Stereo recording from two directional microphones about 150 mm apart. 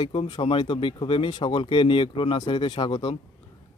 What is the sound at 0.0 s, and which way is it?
Speech, 35° left (ahead or behind).